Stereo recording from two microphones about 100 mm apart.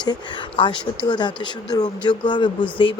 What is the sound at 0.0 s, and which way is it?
Speech, 50° left (ahead or behind).